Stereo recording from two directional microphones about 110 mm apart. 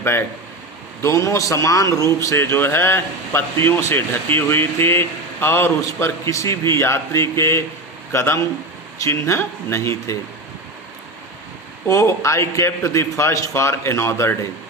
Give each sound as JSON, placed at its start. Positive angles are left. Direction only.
{"t": 0.0, "sound": "a man's voice", "side_deg": 25}
{"t": 11.9, "sound": "a man's voice", "side_deg": 30}